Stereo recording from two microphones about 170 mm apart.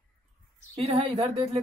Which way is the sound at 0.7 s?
35° right (ahead or behind).